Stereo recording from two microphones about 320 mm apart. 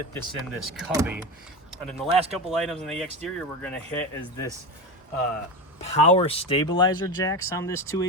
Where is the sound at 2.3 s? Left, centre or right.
Centre.